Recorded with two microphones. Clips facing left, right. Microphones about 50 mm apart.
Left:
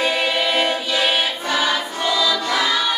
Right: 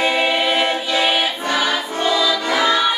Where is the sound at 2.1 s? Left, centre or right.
Right.